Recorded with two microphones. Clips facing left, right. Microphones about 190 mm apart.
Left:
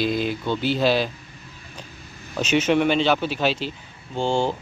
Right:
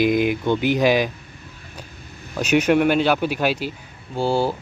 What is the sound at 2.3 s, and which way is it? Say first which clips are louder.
Speech: right 2 dB; 10° right (ahead or behind).